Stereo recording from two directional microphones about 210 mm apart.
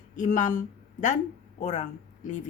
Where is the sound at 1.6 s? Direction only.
35° left (ahead or behind).